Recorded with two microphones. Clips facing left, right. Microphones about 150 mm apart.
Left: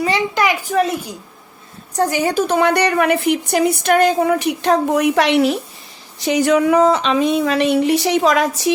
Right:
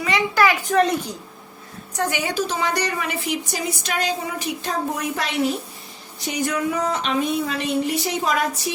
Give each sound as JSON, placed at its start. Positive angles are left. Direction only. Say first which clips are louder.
{"t": 0.3, "sound": "speech", "louder": "right 3 dB", "side_deg": 15}
{"t": 0.7, "sound": "a woman's voice", "louder": "left 1 dB", "side_deg": 5}
{"t": 2.0, "sound": "a woman's voice", "louder": "left 7 dB", "side_deg": 40}
{"t": 6.1, "sound": "speech", "louder": "left 10 dB", "side_deg": 90}